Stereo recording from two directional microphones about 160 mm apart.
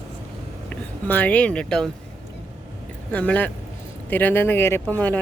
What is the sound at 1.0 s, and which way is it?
Speech, 10° left (ahead or behind).